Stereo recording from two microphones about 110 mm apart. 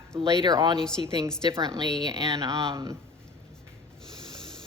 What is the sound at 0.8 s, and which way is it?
Speech, 5° left (ahead or behind).